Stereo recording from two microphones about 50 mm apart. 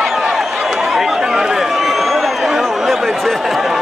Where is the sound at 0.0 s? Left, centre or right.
Centre.